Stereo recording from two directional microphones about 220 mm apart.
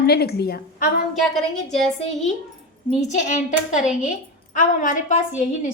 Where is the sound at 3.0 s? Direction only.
35° left (ahead or behind).